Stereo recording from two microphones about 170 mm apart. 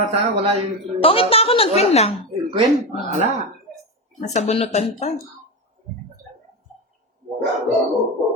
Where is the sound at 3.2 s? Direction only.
40° right (ahead or behind).